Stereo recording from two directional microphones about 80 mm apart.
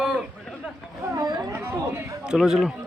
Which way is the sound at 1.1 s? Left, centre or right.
Right.